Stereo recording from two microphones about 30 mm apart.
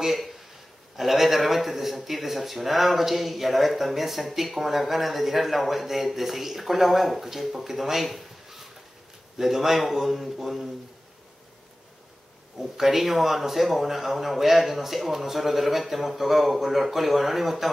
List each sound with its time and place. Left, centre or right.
0.0 s a man's voice: centre
12.5 s speech: centre